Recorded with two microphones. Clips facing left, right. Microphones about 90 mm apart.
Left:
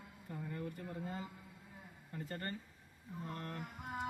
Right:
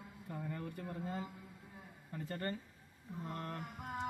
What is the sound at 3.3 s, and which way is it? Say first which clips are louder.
Speech: right 2 dB; 30° right (ahead or behind).